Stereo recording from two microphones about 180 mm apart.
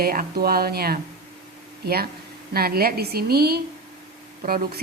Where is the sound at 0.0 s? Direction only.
55° right (ahead or behind).